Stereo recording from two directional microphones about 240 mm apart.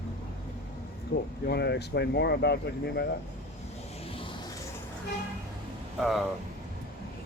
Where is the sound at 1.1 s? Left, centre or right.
Left.